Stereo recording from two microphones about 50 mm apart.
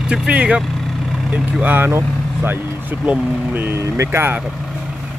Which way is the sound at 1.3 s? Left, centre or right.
Right.